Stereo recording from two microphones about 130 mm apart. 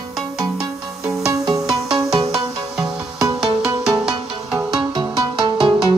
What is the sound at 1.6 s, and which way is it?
Music, 5° right (ahead or behind).